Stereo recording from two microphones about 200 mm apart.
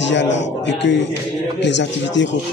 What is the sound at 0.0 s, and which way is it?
Speech, 65° left (ahead or behind).